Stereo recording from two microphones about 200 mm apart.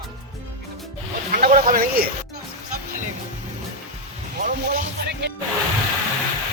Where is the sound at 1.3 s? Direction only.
45° right (ahead or behind).